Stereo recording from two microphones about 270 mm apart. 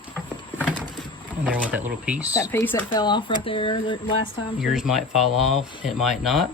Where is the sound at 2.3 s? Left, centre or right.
Centre.